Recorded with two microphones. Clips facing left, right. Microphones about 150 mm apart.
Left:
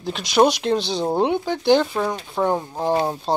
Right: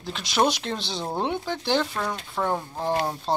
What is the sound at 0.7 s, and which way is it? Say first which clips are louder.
Speech: left 9 dB; 35° left (ahead or behind).